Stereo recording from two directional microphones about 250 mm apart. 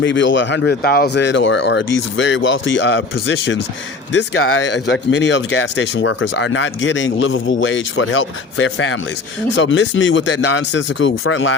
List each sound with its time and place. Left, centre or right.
0.0 s speech: left